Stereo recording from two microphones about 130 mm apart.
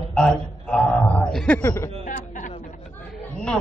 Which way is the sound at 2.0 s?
75° left (ahead or behind).